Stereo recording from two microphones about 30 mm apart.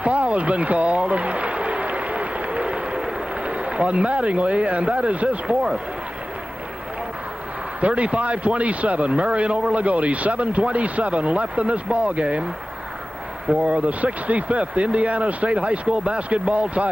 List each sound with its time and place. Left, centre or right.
0.0 s a sound: right
3.4 s speech: right
7.8 s speech: right
13.7 s speech: right